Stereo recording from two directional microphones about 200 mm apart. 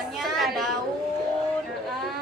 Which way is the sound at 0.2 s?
Centre (ahead or behind).